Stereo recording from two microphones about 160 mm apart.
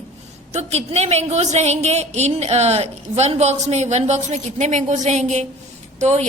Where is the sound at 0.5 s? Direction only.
40° right (ahead or behind).